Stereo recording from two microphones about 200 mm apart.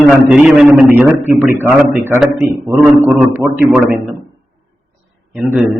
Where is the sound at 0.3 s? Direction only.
5° right (ahead or behind).